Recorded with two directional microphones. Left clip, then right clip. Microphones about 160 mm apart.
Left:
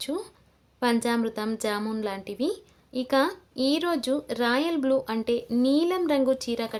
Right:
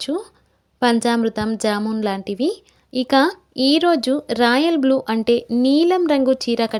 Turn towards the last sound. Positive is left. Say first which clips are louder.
# right 8 dB
turn(degrees=-45)  # may be behind; listen again after turning